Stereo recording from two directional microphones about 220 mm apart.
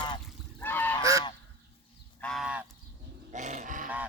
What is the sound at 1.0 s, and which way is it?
Goose, 15° right (ahead or behind).